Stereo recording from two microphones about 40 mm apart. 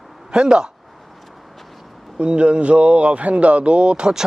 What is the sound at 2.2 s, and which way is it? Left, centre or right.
Speech, right.